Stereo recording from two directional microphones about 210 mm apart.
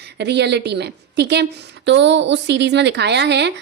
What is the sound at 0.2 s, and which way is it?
A woman's voice, 55° right (ahead or behind).